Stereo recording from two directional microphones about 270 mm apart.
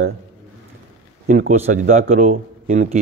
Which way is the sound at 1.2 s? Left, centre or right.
Right.